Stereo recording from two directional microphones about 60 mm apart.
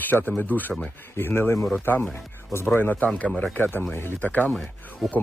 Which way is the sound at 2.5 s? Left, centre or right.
Left.